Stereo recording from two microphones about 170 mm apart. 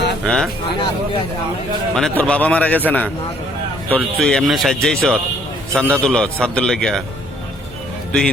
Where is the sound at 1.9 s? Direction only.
5° left (ahead or behind).